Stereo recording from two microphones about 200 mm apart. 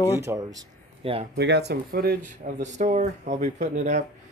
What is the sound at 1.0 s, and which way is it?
Speech, 30° right (ahead or behind).